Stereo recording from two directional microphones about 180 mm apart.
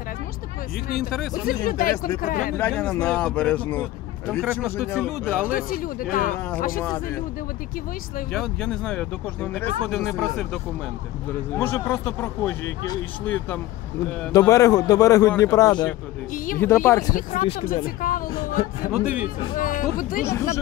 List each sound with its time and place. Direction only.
1.5 s speech: 50° left (ahead or behind)
2.5 s speech: 10° left (ahead or behind)
4.3 s speech: 5° right (ahead or behind)
5.5 s speech: 55° left (ahead or behind)
8.3 s a man's voice: centre (ahead or behind)
17.1 s speech: 50° left (ahead or behind)
18.9 s speech: 5° right (ahead or behind)
19.5 s speech: 50° left (ahead or behind)